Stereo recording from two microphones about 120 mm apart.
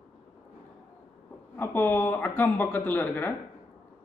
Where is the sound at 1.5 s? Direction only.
15° left (ahead or behind).